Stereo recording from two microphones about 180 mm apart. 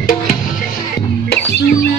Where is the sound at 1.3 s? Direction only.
60° left (ahead or behind).